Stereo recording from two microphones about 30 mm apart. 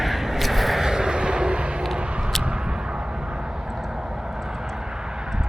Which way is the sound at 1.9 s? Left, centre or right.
Right.